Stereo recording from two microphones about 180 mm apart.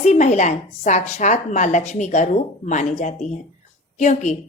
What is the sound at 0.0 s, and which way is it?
A woman's voice, 40° left (ahead or behind).